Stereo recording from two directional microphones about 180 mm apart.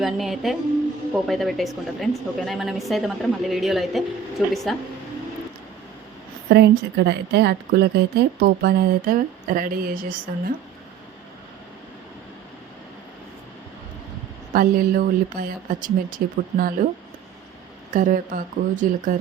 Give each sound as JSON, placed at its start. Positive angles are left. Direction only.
{"t": 0.0, "sound": "a woman's voice", "side_deg": 0}
{"t": 6.5, "sound": "a woman's voice", "side_deg": -65}
{"t": 14.5, "sound": "speech", "side_deg": -55}
{"t": 17.9, "sound": "speech", "side_deg": -50}